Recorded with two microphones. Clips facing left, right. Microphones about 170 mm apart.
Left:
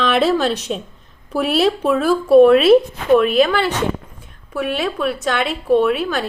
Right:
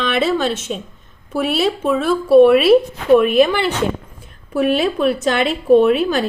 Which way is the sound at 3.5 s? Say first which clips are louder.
Even; 25° right (ahead or behind).